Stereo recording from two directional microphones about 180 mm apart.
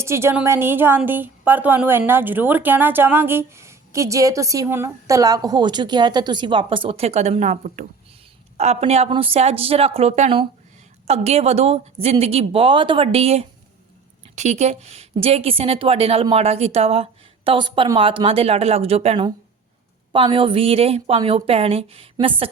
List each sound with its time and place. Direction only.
0.0 s a woman's voice: 15° right (ahead or behind); by 22.4 s 30° right (ahead or behind)